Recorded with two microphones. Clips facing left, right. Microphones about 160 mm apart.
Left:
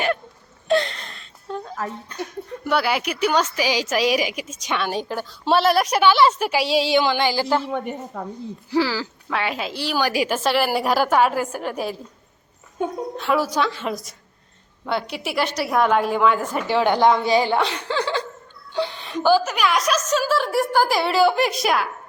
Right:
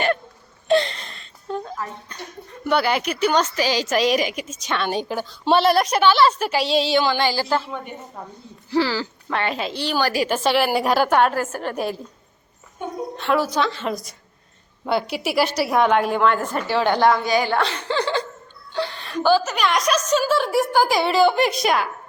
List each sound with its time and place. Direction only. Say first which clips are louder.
0.7 s a sound: right 2 dB; centre (ahead or behind)
2.1 s a woman's voice: left 6 dB; 5° left (ahead or behind)
4.9 s a woman's voice: right 1 dB; centre (ahead or behind)
8.1 s speech: left 5 dB; 85° left
8.7 s a woman's voice: right 1 dB; 10° left (ahead or behind)
13.1 s a woman's voice: right 1 dB; 5° left (ahead or behind)
17.2 s a woman's voice: left 2 dB; 30° left (ahead or behind)
17.5 s a woman's voice: left 1 dB; 15° left (ahead or behind)
17.8 s a woman's voice: right 1 dB; 5° left (ahead or behind)
18.7 s a woman's voice: left 1 dB; 15° left (ahead or behind)